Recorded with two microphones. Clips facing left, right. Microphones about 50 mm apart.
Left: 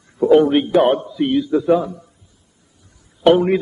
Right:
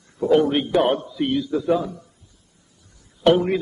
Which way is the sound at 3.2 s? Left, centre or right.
Centre.